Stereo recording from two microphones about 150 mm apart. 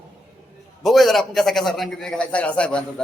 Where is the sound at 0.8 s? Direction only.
Centre (ahead or behind).